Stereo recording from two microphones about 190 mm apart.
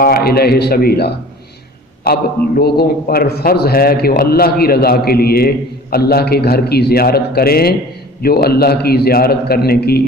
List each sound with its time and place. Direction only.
0.0 s a man's voice: 55° left (ahead or behind)